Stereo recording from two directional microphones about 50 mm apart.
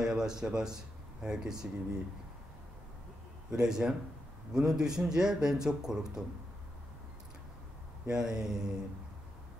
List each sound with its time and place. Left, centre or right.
0.0 s speech: centre
3.5 s speech: centre
8.1 s speech: centre